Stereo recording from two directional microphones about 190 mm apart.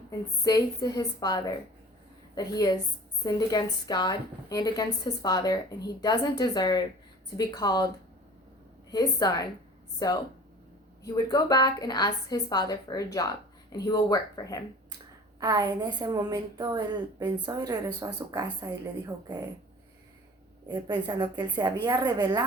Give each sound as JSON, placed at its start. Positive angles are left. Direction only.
{"t": 0.4, "sound": "a woman's voice", "side_deg": 20}
{"t": 8.9, "sound": "a woman's voice", "side_deg": 20}
{"t": 15.4, "sound": "speech", "side_deg": -20}
{"t": 20.7, "sound": "speech", "side_deg": -25}